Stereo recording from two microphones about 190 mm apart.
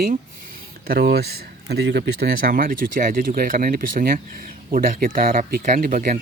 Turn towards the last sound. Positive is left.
turn(degrees=-45)  # may be behind; listen again after turning